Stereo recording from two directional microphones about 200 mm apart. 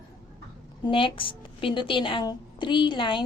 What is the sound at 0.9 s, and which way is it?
A woman's voice, 25° left (ahead or behind).